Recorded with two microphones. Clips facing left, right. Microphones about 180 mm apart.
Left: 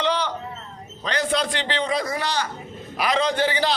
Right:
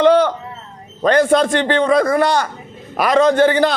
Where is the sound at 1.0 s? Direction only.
50° right (ahead or behind).